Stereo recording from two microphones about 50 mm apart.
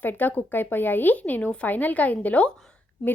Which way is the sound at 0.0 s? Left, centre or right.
Left.